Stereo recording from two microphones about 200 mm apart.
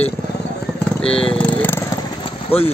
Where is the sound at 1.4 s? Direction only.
10° left (ahead or behind).